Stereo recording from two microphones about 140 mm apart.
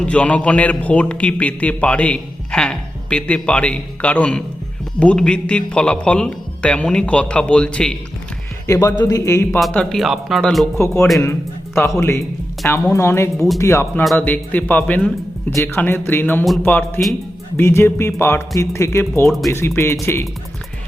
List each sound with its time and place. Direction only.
0.0 s a man's voice: 10° left (ahead or behind)
8.6 s a man's voice: 25° left (ahead or behind)
9.6 s speech: centre (ahead or behind)
10.8 s a man's voice: 20° left (ahead or behind)